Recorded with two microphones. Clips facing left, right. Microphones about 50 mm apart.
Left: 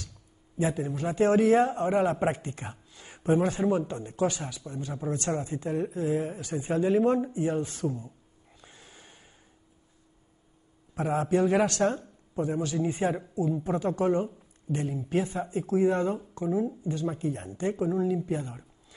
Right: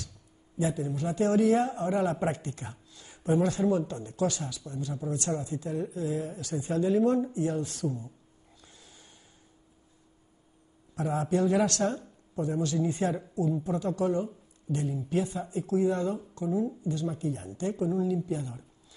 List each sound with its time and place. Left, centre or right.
0.6 s a woman's voice: left
8.5 s snort: left
11.0 s a woman's voice: left
13.7 s a woman's voice: left